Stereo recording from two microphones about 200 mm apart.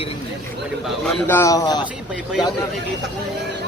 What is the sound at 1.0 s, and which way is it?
Speech, 10° left (ahead or behind).